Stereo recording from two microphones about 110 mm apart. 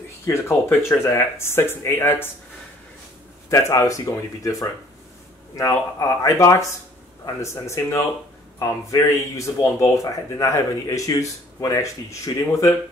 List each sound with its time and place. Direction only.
0.3 s speech: 25° left (ahead or behind)
3.4 s speech: 30° left (ahead or behind)